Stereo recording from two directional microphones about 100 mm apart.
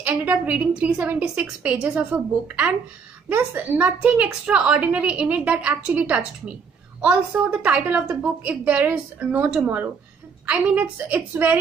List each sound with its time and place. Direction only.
0.0 s a woman's voice: 15° right (ahead or behind)